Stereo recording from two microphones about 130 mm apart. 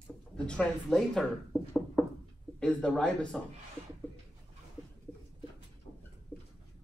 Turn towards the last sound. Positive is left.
turn(degrees=15)  # may be behind; listen again after turning